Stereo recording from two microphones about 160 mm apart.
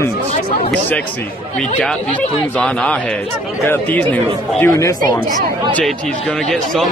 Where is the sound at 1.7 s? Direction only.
5° left (ahead or behind); by 5.2 s 25° left (ahead or behind).